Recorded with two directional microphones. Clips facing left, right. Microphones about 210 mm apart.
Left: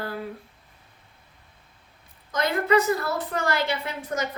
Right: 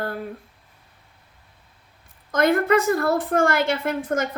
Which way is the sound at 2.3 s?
50° right (ahead or behind).